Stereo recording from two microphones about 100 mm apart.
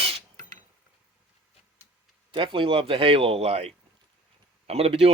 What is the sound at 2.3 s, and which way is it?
Speech, 60° right (ahead or behind).